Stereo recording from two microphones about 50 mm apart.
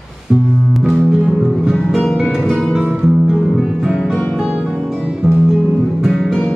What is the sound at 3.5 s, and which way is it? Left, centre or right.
Music, centre.